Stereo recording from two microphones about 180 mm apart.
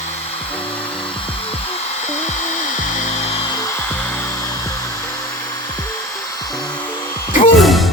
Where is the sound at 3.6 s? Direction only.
15° left (ahead or behind).